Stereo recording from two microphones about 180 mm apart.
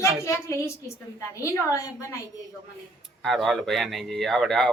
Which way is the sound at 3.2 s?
Centre (ahead or behind).